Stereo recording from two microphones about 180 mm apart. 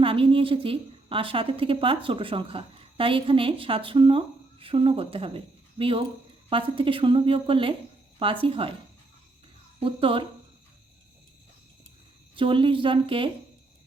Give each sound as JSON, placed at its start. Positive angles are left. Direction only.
{"t": 0.0, "sound": "a woman's voice", "side_deg": -30}
{"t": 9.8, "sound": "a woman's voice", "side_deg": -30}
{"t": 12.4, "sound": "a woman's voice", "side_deg": -30}